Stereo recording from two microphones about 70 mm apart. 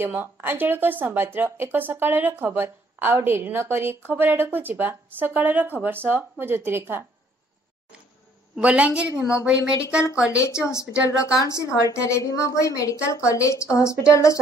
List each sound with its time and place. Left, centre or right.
0.0 s speech: right
8.5 s a woman's voice: centre
10.3 s a woman's voice: left